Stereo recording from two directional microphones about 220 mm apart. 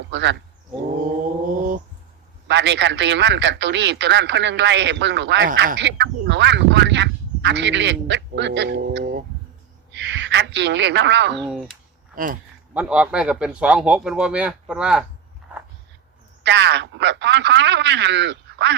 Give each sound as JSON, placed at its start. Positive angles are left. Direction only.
{"t": 0.1, "sound": "speech", "side_deg": -55}
{"t": 2.5, "sound": "a woman's voice", "side_deg": -55}
{"t": 11.3, "sound": "speech", "side_deg": 0}
{"t": 12.1, "sound": "speech", "side_deg": -40}
{"t": 12.7, "sound": "speech", "side_deg": -5}
{"t": 16.4, "sound": "a man's voice", "side_deg": -50}